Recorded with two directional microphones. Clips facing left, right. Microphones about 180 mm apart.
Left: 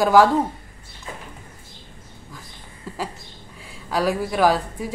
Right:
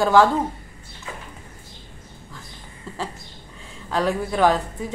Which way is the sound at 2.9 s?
10° left (ahead or behind).